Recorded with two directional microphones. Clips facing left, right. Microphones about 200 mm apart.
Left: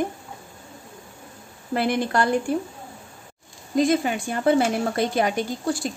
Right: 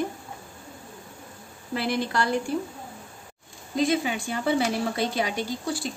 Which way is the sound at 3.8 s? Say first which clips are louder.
Left 1 dB; 50° left (ahead or behind).